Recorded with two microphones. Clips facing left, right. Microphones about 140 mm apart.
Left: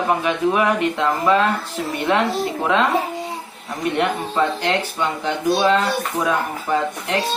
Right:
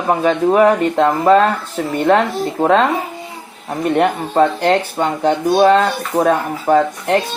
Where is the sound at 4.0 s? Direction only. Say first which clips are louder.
Right 6 dB; 50° right (ahead or behind).